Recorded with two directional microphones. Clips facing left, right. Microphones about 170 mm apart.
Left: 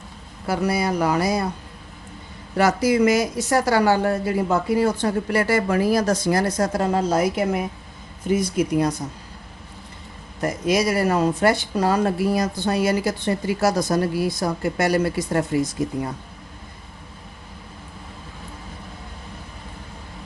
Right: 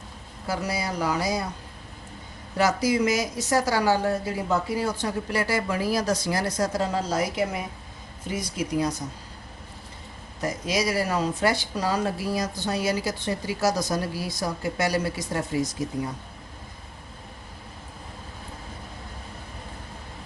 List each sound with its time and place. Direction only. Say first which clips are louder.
0.4 s speech: left 7 dB; 60° left (ahead or behind)
2.6 s speech: left 5 dB; 60° left (ahead or behind)
10.4 s speech: left 6 dB; 55° left (ahead or behind)